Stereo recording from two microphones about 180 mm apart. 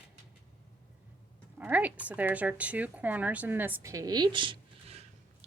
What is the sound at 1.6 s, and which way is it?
A woman's voice, 10° right (ahead or behind).